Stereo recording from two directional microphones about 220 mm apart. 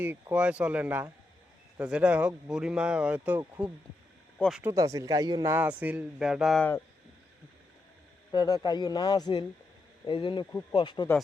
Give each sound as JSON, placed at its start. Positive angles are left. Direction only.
{"t": 0.0, "sound": "speech", "side_deg": -10}
{"t": 4.6, "sound": "speech", "side_deg": -15}
{"t": 8.3, "sound": "a man's voice", "side_deg": 15}